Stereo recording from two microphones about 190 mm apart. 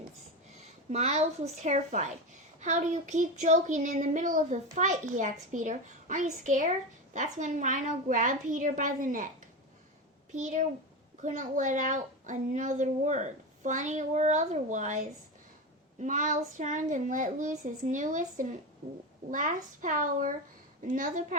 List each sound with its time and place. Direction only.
0.5 s a woman's voice: 35° right (ahead or behind)
10.3 s speech: 40° right (ahead or behind)